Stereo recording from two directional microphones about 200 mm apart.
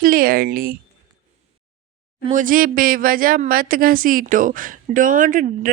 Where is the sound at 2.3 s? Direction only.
40° right (ahead or behind).